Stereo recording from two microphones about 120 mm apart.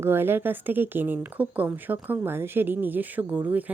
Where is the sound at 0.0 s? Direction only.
20° right (ahead or behind).